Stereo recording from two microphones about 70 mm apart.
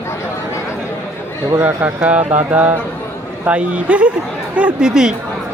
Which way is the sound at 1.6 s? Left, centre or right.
Right.